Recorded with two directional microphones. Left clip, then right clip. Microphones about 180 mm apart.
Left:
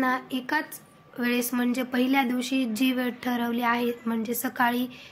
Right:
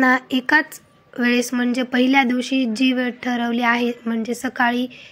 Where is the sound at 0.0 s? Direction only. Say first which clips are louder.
Right 9 dB; 45° right (ahead or behind).